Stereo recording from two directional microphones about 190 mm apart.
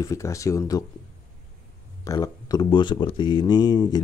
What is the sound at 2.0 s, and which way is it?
Speech, 20° left (ahead or behind).